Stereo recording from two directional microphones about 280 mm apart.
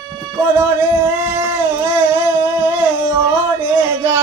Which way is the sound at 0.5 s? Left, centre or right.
Centre.